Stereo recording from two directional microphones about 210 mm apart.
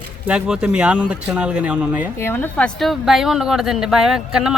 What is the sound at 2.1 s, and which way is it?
A woman's voice, 10° left (ahead or behind).